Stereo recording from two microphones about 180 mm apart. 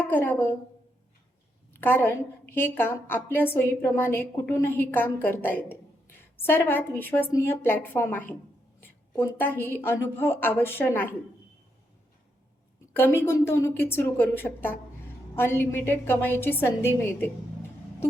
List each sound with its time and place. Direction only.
0.1 s a woman's voice: 10° left (ahead or behind)
1.7 s a woman's voice: 10° left (ahead or behind)
12.9 s a woman's voice: 10° left (ahead or behind)